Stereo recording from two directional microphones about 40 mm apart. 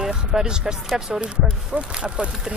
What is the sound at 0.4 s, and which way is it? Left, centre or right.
Speech, centre.